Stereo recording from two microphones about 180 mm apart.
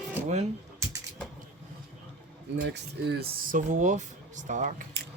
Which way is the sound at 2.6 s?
70° right (ahead or behind).